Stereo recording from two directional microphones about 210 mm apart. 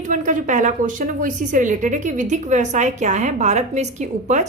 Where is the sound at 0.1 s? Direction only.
35° right (ahead or behind).